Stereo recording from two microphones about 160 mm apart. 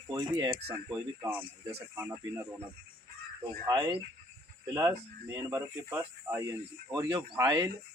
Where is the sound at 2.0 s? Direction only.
15° right (ahead or behind).